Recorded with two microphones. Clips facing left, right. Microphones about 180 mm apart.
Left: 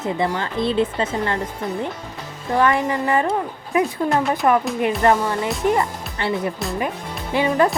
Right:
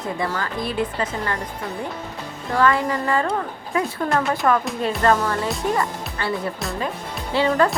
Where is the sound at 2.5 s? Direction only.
20° left (ahead or behind).